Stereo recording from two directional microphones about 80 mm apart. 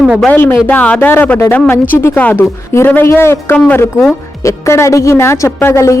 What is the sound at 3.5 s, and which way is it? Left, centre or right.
Speech, centre.